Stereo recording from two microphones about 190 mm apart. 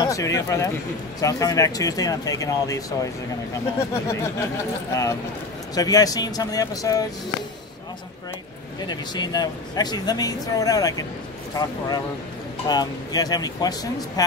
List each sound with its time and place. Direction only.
0.0 s speech: 15° left (ahead or behind)
5.8 s speech: 20° left (ahead or behind)
8.8 s speech: 20° left (ahead or behind)